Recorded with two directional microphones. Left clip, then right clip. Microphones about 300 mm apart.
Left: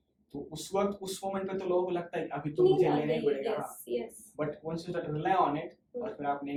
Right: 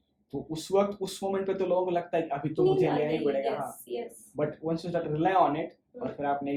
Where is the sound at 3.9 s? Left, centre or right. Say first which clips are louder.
Left 3 dB; centre.